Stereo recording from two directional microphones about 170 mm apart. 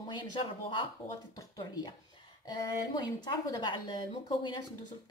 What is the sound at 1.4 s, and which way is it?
Speech, 25° left (ahead or behind).